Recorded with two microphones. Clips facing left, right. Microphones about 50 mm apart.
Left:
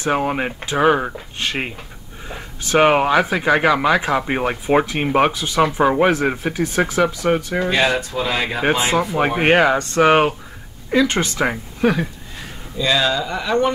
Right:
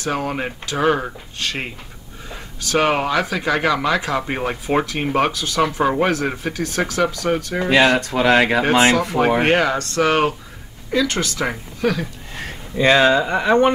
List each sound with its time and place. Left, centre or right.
0.0 s speech: centre
7.7 s speech: right
9.4 s speech: centre
12.7 s speech: right